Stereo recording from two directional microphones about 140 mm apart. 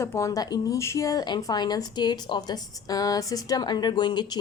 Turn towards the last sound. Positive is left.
turn(degrees=30)  # may be behind; listen again after turning